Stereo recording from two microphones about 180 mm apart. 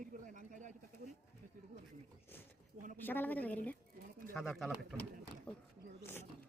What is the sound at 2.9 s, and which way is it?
A woman's voice, 10° left (ahead or behind).